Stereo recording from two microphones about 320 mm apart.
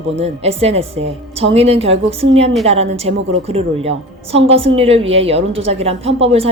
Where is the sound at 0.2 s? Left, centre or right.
Centre.